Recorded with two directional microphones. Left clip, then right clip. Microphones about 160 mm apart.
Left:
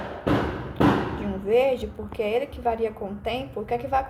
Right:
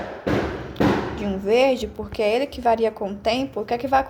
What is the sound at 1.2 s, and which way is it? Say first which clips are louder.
A woman's voice: right 4 dB; 50° right (ahead or behind).